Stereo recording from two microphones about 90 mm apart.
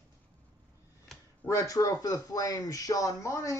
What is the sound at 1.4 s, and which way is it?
Speech, 35° left (ahead or behind).